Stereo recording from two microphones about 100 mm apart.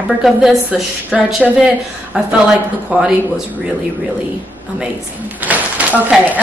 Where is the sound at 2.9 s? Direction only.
15° right (ahead or behind).